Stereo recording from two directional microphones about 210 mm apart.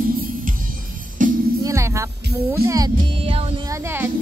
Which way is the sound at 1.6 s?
15° right (ahead or behind).